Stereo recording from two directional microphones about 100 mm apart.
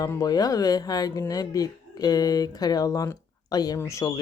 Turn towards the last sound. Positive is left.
turn(degrees=30)  # may be behind; listen again after turning